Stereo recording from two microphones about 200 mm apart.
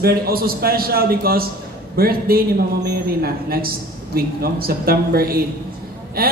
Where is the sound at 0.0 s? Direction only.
50° right (ahead or behind).